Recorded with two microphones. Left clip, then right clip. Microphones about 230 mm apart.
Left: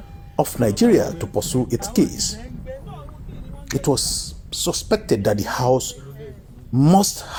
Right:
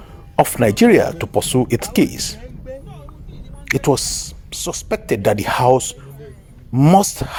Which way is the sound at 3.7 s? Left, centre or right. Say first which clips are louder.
Right 4 dB; right.